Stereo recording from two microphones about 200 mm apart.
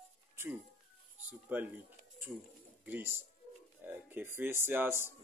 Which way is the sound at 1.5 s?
10° right (ahead or behind).